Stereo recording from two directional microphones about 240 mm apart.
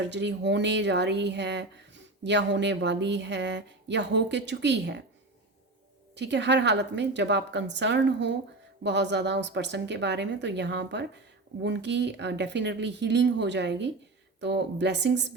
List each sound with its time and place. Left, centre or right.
0.1 s speech: right
6.1 s speech: right